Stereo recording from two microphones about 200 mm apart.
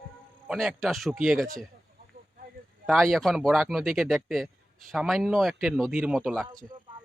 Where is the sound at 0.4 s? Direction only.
Centre (ahead or behind).